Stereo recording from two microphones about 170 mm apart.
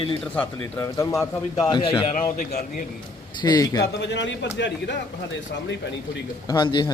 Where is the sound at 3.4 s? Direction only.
25° left (ahead or behind).